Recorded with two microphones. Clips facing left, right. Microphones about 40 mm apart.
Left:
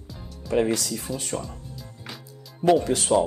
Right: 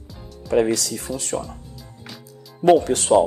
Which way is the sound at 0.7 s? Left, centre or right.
Right.